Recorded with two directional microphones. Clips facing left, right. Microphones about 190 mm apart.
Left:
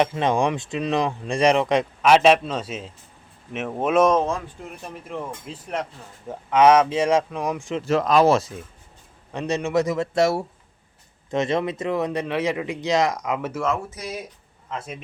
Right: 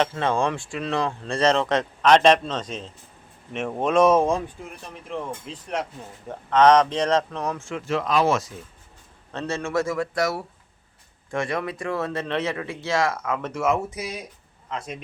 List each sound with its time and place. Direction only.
0.0 s speech: 15° left (ahead or behind)
4.1 s speech: 10° right (ahead or behind); by 7.8 s 15° left (ahead or behind)
7.9 s speech: 40° left (ahead or behind)
9.3 s speech: 15° left (ahead or behind)
13.7 s speech: 10° right (ahead or behind)
14.7 s speech: 5° left (ahead or behind)